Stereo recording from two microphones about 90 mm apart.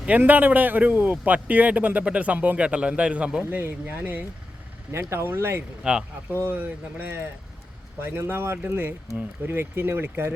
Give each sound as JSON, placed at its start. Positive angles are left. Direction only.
{"t": 0.2, "sound": "speech", "side_deg": -20}
{"t": 5.8, "sound": "speech", "side_deg": -10}
{"t": 6.4, "sound": "speech", "side_deg": -20}